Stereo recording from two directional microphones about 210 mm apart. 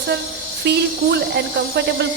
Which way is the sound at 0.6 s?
50° right (ahead or behind).